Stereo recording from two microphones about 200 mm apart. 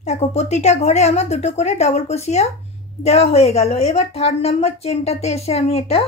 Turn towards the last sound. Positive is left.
turn(degrees=30)  # may be behind; listen again after turning